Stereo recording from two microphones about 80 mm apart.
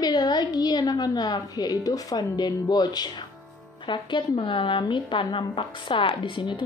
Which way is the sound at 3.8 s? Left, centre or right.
Left.